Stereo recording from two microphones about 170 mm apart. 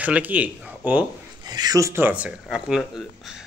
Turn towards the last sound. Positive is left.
turn(degrees=-5)  # may be behind; listen again after turning